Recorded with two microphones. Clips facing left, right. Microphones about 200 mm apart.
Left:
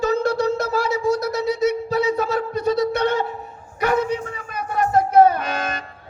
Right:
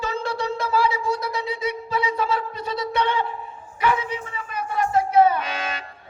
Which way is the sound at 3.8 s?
45° left (ahead or behind).